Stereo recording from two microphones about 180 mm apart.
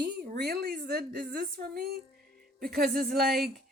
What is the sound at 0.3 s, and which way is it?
Speech, 65° right (ahead or behind).